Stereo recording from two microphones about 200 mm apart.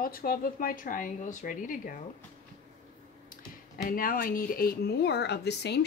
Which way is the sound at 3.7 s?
45° left (ahead or behind).